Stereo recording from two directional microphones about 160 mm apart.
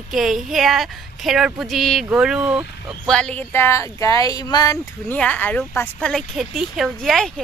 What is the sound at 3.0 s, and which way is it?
Speech, 5° left (ahead or behind).